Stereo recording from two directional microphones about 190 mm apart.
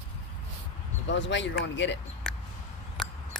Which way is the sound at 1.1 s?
70° left (ahead or behind).